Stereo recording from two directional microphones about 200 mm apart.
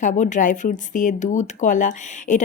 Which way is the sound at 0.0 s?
40° left (ahead or behind).